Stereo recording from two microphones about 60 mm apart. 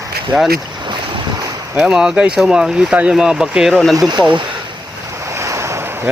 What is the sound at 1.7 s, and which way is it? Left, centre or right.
Speech, centre.